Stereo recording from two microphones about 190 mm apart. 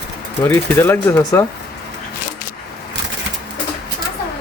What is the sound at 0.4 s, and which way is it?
Speech, 10° left (ahead or behind).